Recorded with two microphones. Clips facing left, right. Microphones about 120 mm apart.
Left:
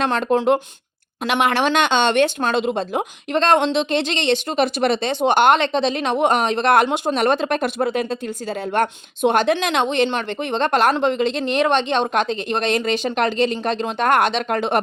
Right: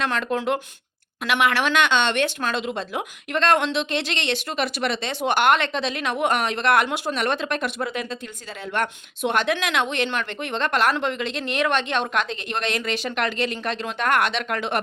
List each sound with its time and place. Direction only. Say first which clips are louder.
0.0 s speech: left 6 dB; 35° left (ahead or behind)